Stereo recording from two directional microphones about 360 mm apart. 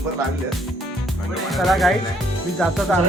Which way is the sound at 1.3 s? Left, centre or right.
Centre.